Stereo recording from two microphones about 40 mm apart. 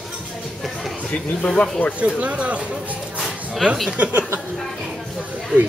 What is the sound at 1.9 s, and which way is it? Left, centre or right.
Speech, right.